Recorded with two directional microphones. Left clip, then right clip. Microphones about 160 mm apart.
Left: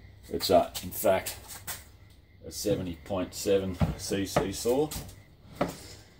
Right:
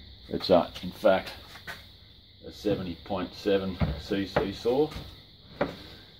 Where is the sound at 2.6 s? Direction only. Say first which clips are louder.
Even; 20° right (ahead or behind).